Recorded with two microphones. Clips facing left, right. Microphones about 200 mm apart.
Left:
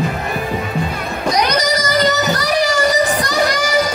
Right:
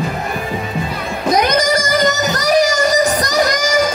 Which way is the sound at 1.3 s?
50° right (ahead or behind).